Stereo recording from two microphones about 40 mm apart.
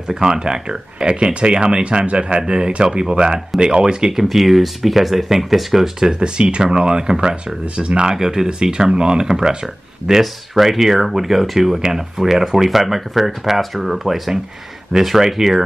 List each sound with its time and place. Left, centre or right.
0.1 s speech: centre
4.1 s speech: centre
5.9 s speech: centre
10.2 s speech: centre